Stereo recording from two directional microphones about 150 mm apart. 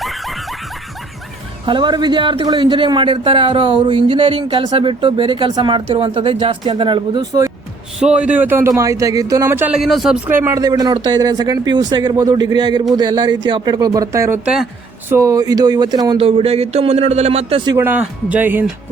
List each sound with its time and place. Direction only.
0.0 s snicker: centre (ahead or behind)
1.6 s speech: 30° right (ahead or behind)
7.9 s speech: 5° right (ahead or behind)
10.2 s speech: 15° right (ahead or behind)
10.6 s speech: 25° right (ahead or behind)
14.4 s speech: 5° right (ahead or behind)
15.1 s speech: 20° right (ahead or behind); by 17.6 s 45° right (ahead or behind)
17.7 s speech: 10° right (ahead or behind)